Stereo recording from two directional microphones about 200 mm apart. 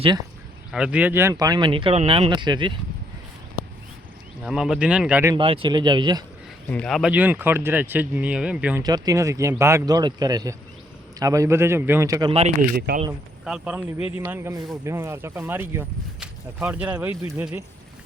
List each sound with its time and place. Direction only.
0.7 s speech: 5° right (ahead or behind); by 2.7 s 25° right (ahead or behind)
4.4 s speech: 5° right (ahead or behind)
5.3 s speech: 25° right (ahead or behind)
6.7 s speech: 5° left (ahead or behind)
8.8 s speech: 20° right (ahead or behind)
12.3 s speech: 30° right (ahead or behind)
12.7 s speech: 50° right (ahead or behind)
13.4 s speech: 5° right (ahead or behind)